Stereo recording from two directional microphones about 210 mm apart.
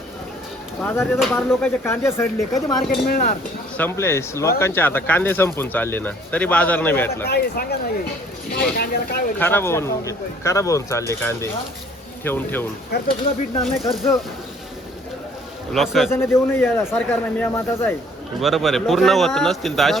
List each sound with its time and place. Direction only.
0.8 s speech: 10° left (ahead or behind)
1.4 s speech: centre (ahead or behind)
1.8 s speech: 10° left (ahead or behind)
3.1 s speech: 45° left (ahead or behind)
3.8 s speech: 10° left (ahead or behind)
7.3 s speech: 45° left (ahead or behind)
8.8 s speech: 45° left (ahead or behind)
9.4 s speech: 10° left (ahead or behind)
12.9 s speech: 50° left (ahead or behind)
13.7 s speech: centre (ahead or behind)
15.7 s speech: centre (ahead or behind)
16.1 s speech: 10° left (ahead or behind)